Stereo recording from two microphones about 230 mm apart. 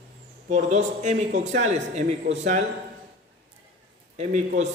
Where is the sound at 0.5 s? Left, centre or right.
Right.